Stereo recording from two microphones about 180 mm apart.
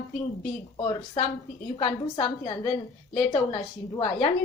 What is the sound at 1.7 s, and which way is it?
A woman's voice, 30° left (ahead or behind).